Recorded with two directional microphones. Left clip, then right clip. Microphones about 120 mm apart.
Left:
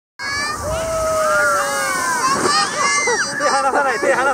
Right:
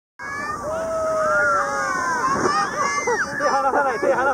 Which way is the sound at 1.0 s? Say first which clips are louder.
Left 3 dB; 30° left (ahead or behind).